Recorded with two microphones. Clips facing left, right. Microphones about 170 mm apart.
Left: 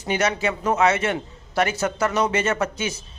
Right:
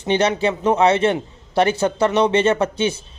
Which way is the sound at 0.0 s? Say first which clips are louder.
Right 5 dB; 30° right (ahead or behind).